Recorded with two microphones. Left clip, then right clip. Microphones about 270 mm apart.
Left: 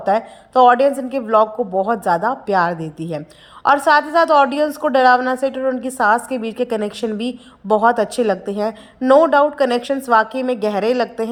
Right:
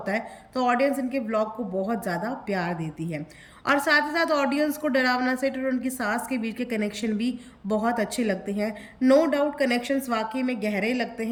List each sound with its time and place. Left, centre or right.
0.0 s a woman's voice: centre
8.2 s a woman's voice: left
8.5 s a woman's voice: centre